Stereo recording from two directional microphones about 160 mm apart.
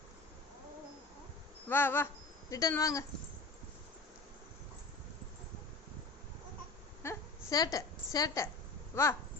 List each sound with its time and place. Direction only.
1.7 s speech: 15° left (ahead or behind)
7.0 s a sound: 20° left (ahead or behind)
8.9 s speech: 15° left (ahead or behind)